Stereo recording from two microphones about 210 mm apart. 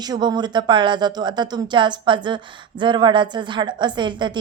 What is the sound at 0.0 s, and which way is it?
Speech, 20° right (ahead or behind).